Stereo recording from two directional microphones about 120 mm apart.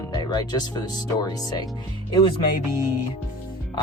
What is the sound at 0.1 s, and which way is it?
Speech, 35° left (ahead or behind).